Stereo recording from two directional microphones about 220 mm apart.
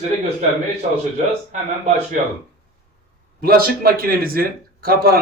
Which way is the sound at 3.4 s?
45° right (ahead or behind).